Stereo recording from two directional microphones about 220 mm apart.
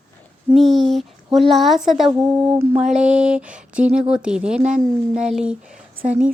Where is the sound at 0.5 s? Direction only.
Centre (ahead or behind).